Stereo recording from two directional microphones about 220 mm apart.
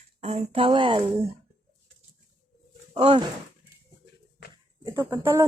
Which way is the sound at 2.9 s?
25° right (ahead or behind).